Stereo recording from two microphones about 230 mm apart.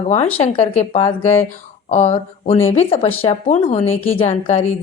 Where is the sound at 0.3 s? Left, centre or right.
Left.